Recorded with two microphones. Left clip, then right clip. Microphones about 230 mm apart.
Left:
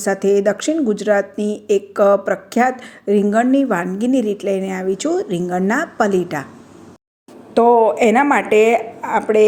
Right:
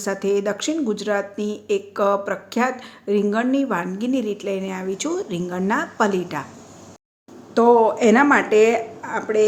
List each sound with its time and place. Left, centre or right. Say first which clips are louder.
0.0 s speech: left 6 dB; centre
7.6 s speech: left 3 dB; centre